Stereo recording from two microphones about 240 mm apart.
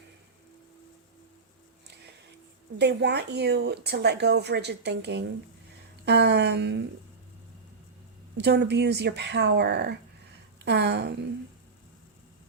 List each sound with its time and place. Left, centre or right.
2.7 s speech: right
8.4 s speech: right